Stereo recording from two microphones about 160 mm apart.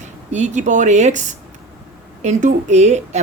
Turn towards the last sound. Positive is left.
turn(degrees=-45)  # may be behind; listen again after turning